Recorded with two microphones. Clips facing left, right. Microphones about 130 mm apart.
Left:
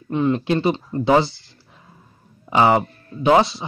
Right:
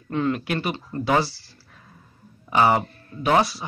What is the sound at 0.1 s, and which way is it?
Speech, 20° left (ahead or behind).